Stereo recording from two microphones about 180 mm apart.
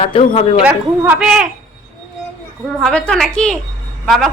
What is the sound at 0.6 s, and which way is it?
Speech, 5° right (ahead or behind).